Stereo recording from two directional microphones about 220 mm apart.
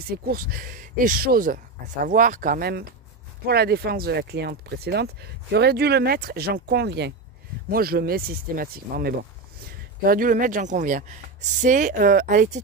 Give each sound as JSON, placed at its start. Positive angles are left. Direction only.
{"t": 0.1, "sound": "speech", "side_deg": -40}